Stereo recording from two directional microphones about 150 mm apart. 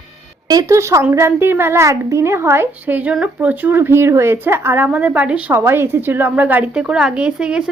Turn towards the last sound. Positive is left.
turn(degrees=-5)  # may be behind; listen again after turning